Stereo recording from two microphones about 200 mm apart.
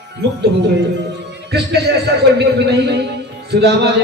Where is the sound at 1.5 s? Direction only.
55° right (ahead or behind).